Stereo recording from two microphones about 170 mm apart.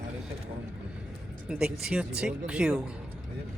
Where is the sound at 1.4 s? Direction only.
5° right (ahead or behind).